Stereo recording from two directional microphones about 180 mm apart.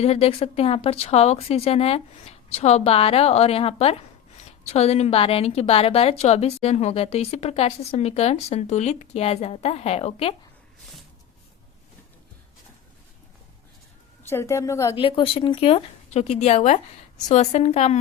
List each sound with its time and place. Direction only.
0.0 s a woman's voice: 35° left (ahead or behind)
14.3 s a woman's voice: 15° left (ahead or behind)
14.9 s a woman's voice: 30° left (ahead or behind)